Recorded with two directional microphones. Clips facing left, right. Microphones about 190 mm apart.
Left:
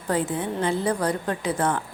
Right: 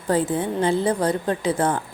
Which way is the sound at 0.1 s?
30° right (ahead or behind).